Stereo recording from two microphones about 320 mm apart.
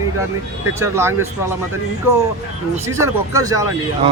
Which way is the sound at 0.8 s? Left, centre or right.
Centre.